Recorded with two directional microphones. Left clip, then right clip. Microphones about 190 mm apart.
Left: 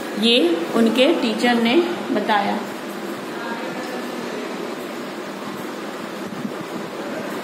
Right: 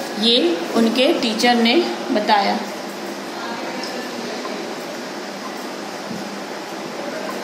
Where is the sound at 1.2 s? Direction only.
15° right (ahead or behind).